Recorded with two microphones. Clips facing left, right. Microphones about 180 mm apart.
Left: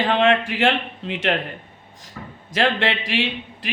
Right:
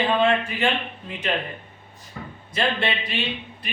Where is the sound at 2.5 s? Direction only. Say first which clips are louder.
Left 4 dB; 90° left.